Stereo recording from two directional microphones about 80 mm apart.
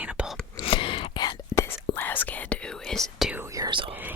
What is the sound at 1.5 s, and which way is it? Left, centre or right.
Whispering, right.